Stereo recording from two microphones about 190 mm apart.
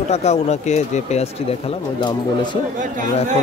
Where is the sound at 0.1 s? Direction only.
35° left (ahead or behind).